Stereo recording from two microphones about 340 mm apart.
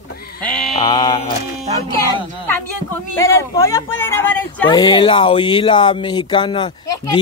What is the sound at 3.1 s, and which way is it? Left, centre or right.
Speech, centre.